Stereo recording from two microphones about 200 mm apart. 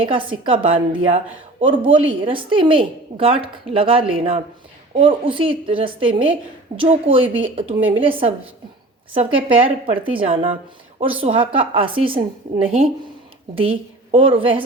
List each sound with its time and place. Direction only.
0.0 s a woman's voice: 25° right (ahead or behind)
13.6 s a woman's voice: 25° right (ahead or behind)